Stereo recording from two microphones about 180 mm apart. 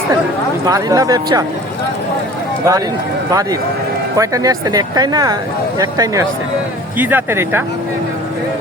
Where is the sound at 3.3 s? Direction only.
20° right (ahead or behind).